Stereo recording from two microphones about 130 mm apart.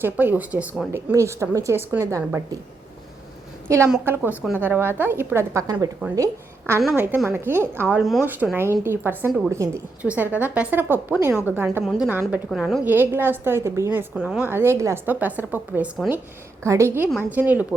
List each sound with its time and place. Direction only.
0.0 s a woman's voice: 15° right (ahead or behind)
3.7 s a woman's voice: 25° right (ahead or behind)
10.0 s a woman's voice: 10° right (ahead or behind)
11.8 s a woman's voice: 5° right (ahead or behind)
12.8 s a woman's voice: 15° right (ahead or behind)
14.2 s a woman's voice: 5° right (ahead or behind)
14.5 s a woman's voice: 20° right (ahead or behind)